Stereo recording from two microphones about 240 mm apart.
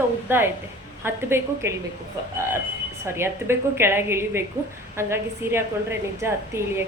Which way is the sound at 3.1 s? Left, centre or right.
Centre.